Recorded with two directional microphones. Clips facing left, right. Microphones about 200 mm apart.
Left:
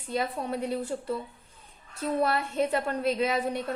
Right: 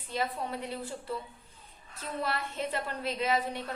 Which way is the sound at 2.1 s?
45° left (ahead or behind).